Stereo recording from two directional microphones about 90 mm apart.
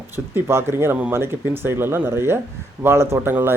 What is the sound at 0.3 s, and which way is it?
Speech, 25° right (ahead or behind).